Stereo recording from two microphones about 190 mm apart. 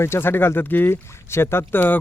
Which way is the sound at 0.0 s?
10° left (ahead or behind).